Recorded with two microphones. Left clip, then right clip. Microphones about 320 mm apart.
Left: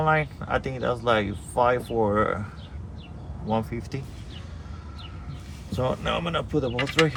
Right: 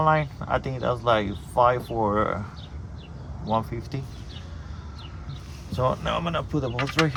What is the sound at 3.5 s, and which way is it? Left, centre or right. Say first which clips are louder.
Speech: right 1 dB; right.